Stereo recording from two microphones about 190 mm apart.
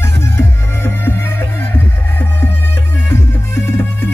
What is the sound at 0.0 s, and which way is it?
Music, 15° left (ahead or behind).